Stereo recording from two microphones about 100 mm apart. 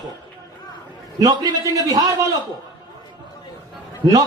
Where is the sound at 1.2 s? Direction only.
40° right (ahead or behind).